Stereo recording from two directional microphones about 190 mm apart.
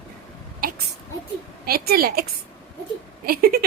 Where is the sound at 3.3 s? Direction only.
50° right (ahead or behind).